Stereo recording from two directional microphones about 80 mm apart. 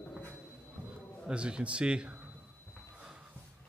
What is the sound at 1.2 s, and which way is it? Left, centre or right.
Speech, centre.